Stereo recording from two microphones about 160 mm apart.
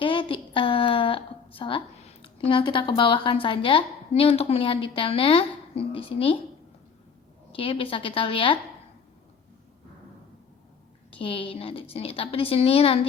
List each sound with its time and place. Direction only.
0.0 s a sound: 30° left (ahead or behind)
2.5 s a woman's voice: 30° left (ahead or behind)
7.5 s a woman's voice: 35° left (ahead or behind)
11.2 s a woman's voice: 35° left (ahead or behind)